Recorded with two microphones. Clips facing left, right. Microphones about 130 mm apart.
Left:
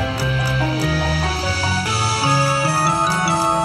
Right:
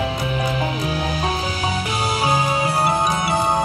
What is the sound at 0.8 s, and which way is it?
Music, 75° left (ahead or behind).